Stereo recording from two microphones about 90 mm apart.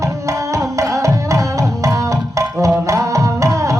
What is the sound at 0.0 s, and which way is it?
Tabla, 35° right (ahead or behind).